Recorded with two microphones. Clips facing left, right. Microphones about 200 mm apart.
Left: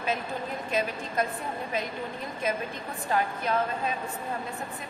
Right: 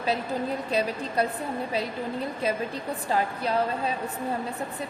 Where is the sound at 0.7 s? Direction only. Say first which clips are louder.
Left 1 dB; 35° right (ahead or behind).